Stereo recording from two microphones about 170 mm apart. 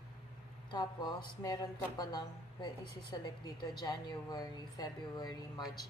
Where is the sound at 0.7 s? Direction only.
25° left (ahead or behind).